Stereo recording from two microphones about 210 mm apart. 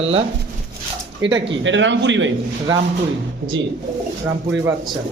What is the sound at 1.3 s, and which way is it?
Speech, 60° right (ahead or behind).